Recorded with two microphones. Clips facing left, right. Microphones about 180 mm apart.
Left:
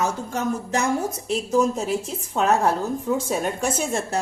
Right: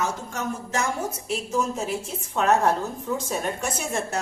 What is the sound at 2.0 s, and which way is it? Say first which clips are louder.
Speech: left 1 dB; 35° left (ahead or behind).